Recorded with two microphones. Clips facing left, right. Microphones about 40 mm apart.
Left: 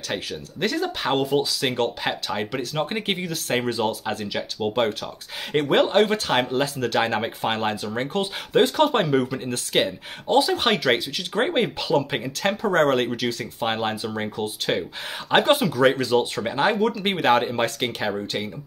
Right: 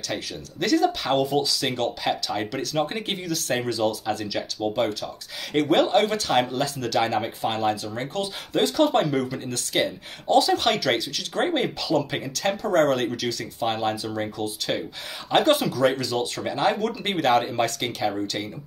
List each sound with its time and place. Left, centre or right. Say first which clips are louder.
0.1 s speech: left 3 dB; left
11.9 s speech: left 2 dB; left